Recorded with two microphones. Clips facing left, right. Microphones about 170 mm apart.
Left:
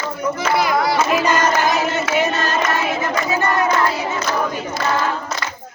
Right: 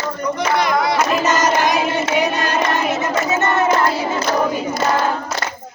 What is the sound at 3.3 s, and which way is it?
Battle cry, 25° right (ahead or behind).